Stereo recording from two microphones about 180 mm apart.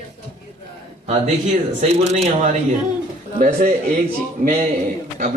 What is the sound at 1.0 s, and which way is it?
Speech, 45° right (ahead or behind).